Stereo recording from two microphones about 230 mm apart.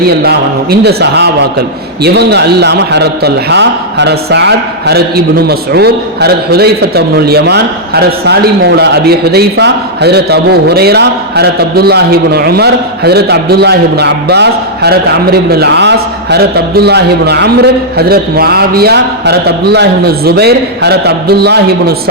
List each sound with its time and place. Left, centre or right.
0.0 s a man's voice: right